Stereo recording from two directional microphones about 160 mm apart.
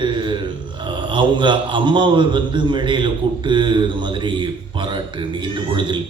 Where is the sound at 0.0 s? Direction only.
30° right (ahead or behind).